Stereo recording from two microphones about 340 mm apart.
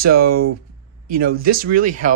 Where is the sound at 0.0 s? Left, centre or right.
Right.